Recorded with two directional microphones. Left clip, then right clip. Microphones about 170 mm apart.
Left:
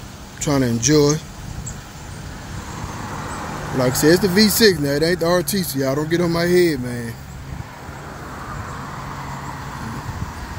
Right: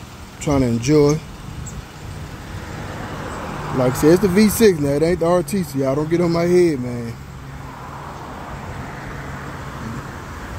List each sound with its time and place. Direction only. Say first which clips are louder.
0.4 s speech: even; 10° right (ahead or behind)
3.8 s speech: right 1 dB; 15° right (ahead or behind)